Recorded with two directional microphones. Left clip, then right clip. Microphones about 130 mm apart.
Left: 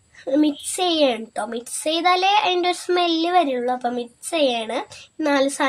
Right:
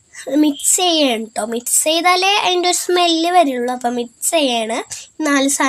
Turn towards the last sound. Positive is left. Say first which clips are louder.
# right 3 dB
turn(degrees=-40)  # may be behind; listen again after turning